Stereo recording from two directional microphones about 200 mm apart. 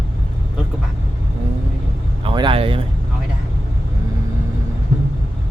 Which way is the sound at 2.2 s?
25° right (ahead or behind).